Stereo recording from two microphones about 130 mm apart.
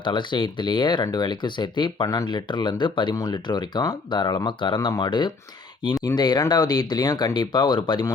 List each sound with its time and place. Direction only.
0.0 s speech: 40° left (ahead or behind)